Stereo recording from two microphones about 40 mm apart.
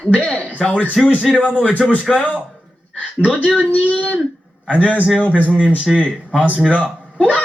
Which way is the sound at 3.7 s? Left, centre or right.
Left.